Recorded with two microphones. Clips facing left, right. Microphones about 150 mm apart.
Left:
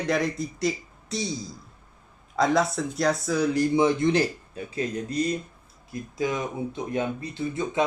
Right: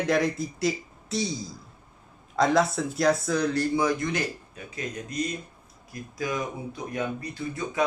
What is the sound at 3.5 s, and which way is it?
Speech, 20° left (ahead or behind).